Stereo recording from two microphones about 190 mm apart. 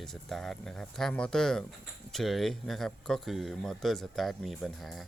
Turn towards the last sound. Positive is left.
turn(degrees=0)  # may be behind; listen again after turning